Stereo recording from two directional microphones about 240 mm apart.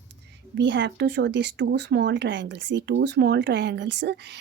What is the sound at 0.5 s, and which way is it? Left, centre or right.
Speech, right.